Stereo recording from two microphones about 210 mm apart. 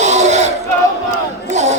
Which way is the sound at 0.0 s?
35° right (ahead or behind).